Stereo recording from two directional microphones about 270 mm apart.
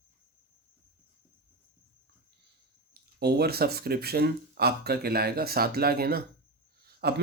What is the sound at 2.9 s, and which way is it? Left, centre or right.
Speech, right.